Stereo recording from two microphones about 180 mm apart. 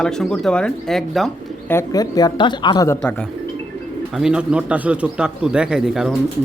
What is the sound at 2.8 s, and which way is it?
Speech, 10° left (ahead or behind).